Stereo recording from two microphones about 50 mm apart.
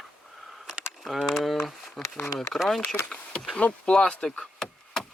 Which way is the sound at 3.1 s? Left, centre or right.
Centre.